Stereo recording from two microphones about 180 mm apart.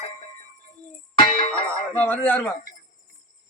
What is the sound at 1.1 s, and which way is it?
Music, 30° left (ahead or behind).